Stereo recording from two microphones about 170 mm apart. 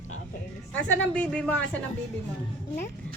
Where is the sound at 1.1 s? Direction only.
5° left (ahead or behind).